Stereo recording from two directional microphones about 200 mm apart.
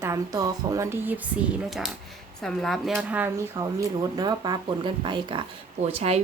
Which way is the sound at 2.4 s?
Centre (ahead or behind).